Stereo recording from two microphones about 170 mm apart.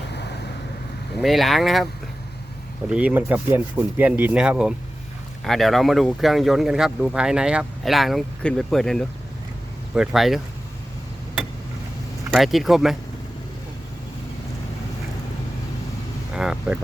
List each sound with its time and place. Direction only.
0.1 s vehicle: 80° left
1.2 s speech: centre (ahead or behind)
2.9 s speech: 10° right (ahead or behind)
12.3 s speech: centre (ahead or behind)
16.3 s speech: 5° right (ahead or behind)